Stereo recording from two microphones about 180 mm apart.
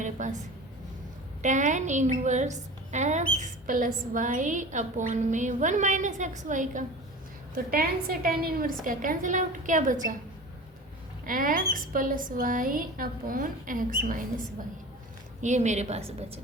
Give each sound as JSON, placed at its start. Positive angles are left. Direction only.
{"t": 0.0, "sound": "a sound", "side_deg": -45}
{"t": 1.4, "sound": "a woman's voice", "side_deg": -40}
{"t": 7.5, "sound": "a woman's voice", "side_deg": -55}
{"t": 11.3, "sound": "a woman's voice", "side_deg": -50}